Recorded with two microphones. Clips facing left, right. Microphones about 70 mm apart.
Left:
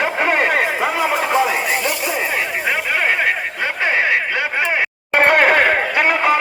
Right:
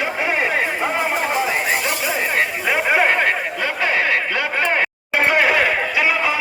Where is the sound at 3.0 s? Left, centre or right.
Centre.